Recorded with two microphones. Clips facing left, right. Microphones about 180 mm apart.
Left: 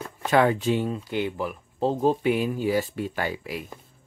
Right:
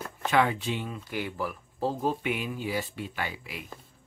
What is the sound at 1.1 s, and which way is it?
Speech, 25° left (ahead or behind).